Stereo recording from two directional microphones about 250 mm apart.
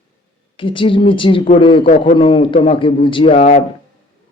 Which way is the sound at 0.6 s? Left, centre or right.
Centre.